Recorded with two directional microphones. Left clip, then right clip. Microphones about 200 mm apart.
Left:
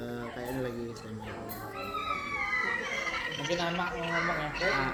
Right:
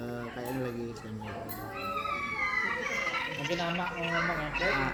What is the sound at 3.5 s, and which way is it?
Speech, 45° left (ahead or behind).